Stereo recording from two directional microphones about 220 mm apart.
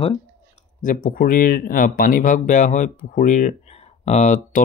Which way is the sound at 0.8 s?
40° left (ahead or behind).